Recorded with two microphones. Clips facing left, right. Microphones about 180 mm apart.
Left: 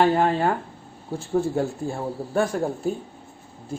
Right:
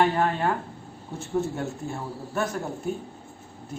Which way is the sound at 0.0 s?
30° left (ahead or behind).